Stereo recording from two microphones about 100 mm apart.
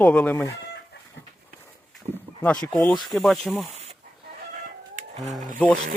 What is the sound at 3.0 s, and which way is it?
Speech, centre (ahead or behind).